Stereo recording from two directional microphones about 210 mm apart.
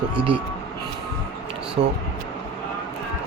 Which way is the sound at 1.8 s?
35° right (ahead or behind).